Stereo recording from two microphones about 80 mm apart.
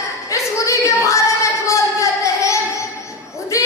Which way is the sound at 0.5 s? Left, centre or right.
Left.